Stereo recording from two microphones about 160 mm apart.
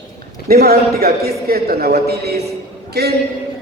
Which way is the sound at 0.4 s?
70° right (ahead or behind).